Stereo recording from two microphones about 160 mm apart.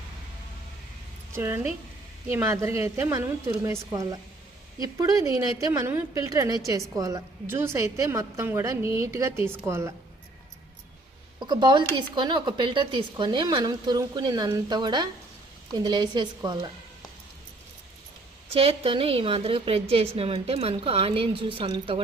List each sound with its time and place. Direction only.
1.3 s a woman's voice: 15° right (ahead or behind)
11.3 s speech: 25° right (ahead or behind)
18.5 s a woman's voice: 35° right (ahead or behind)